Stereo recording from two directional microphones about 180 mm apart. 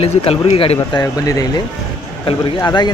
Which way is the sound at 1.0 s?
20° left (ahead or behind).